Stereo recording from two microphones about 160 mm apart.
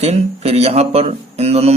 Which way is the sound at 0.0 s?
40° right (ahead or behind).